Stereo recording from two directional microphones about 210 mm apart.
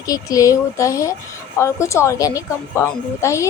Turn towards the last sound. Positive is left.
turn(degrees=15)  # may be behind; listen again after turning